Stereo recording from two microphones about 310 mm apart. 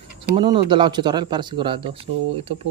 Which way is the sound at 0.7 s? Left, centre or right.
Centre.